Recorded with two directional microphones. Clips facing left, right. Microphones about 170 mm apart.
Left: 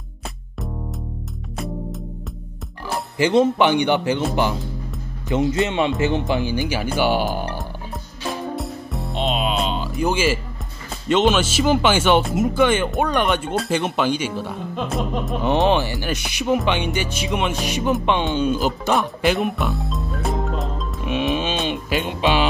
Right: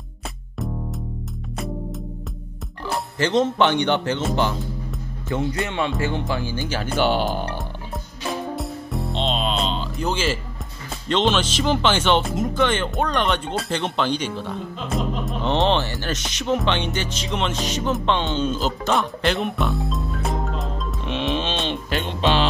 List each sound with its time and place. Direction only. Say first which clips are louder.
3.2 s speech: left 3 dB; 10° left (ahead or behind)
5.3 s speech: left 5 dB; 20° left (ahead or behind); by 7.6 s 5° left (ahead or behind)
8.5 s music: even; centre (ahead or behind)
10.9 s speech: left 3 dB; 10° left (ahead or behind)